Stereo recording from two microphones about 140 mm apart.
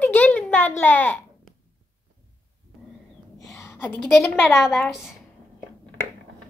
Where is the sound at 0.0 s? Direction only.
15° left (ahead or behind).